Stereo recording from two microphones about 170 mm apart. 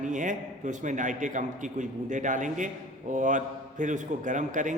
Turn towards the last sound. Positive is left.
turn(degrees=-45)  # may be behind; listen again after turning